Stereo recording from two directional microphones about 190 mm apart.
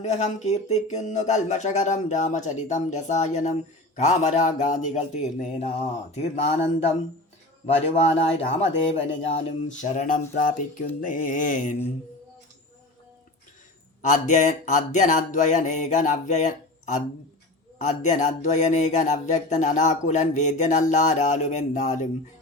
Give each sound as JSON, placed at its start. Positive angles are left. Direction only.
{"t": 0.0, "sound": "speech", "side_deg": 35}
{"t": 14.0, "sound": "speech", "side_deg": 40}